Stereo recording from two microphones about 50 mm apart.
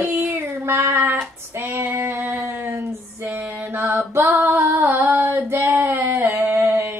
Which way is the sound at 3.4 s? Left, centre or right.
Right.